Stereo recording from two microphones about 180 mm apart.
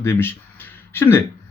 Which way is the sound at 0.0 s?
15° left (ahead or behind).